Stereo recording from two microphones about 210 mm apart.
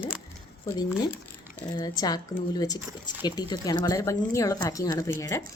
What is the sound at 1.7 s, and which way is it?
Speech, 20° left (ahead or behind).